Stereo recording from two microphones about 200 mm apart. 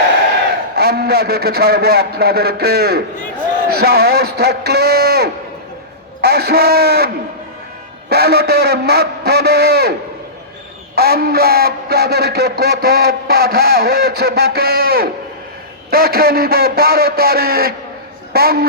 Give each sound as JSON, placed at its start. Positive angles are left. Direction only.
{"t": 0.8, "sound": "speech", "side_deg": -50}
{"t": 8.1, "sound": "speech", "side_deg": -50}
{"t": 10.9, "sound": "speech", "side_deg": -50}